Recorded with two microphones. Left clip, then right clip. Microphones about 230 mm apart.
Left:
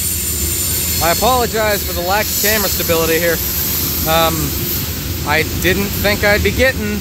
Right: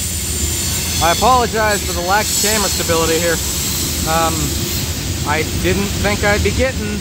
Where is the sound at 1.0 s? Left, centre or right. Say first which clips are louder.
Right 2 dB; centre.